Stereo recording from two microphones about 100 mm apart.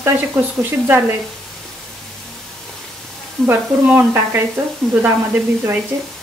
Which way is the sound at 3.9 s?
20° right (ahead or behind).